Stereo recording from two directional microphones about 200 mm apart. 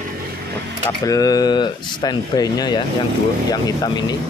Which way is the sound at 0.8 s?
15° left (ahead or behind).